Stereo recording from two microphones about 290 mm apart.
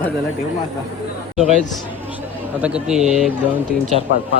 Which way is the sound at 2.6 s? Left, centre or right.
Centre.